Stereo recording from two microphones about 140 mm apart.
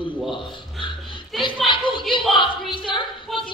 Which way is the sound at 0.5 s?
35° left (ahead or behind).